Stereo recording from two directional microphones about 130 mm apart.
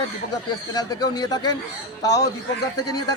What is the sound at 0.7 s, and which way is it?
A man's voice, 30° left (ahead or behind).